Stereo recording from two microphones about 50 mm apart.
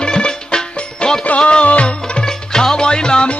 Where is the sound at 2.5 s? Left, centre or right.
Centre.